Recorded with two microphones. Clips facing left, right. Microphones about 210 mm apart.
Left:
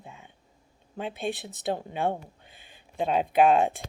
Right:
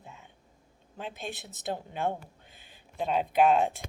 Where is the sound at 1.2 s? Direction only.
55° left (ahead or behind).